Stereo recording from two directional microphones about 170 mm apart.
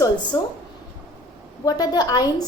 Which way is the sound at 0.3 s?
25° left (ahead or behind).